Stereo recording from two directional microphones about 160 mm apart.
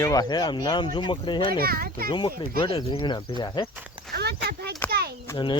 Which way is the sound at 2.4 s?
35° left (ahead or behind).